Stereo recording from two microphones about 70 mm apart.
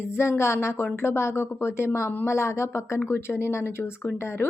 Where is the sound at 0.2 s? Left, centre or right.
Left.